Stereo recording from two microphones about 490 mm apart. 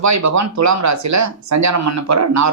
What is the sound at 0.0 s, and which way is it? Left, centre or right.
Speech, right.